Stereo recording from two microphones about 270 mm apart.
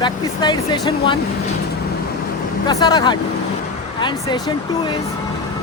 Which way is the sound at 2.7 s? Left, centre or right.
Centre.